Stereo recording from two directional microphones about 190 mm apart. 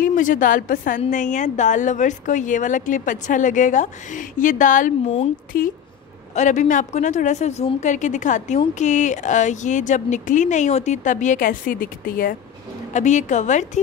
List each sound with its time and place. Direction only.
0.0 s a woman's voice: 45° left (ahead or behind)
5.5 s a woman's voice: 50° left (ahead or behind)